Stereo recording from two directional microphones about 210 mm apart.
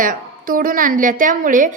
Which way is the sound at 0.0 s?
40° right (ahead or behind).